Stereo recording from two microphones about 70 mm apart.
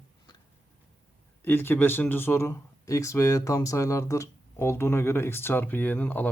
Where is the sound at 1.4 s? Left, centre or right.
Left.